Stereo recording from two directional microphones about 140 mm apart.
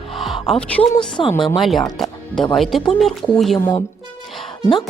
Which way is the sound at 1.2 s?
35° left (ahead or behind).